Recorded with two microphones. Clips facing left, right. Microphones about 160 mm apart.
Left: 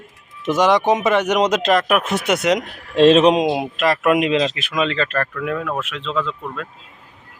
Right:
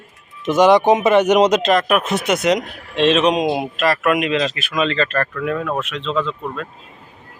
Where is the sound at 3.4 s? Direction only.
15° left (ahead or behind).